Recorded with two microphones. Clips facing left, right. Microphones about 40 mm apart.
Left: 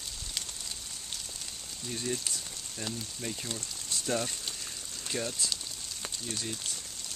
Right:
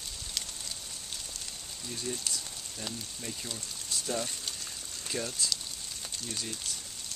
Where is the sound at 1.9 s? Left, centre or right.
Centre.